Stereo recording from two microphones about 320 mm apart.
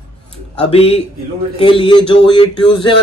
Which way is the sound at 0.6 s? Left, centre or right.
Centre.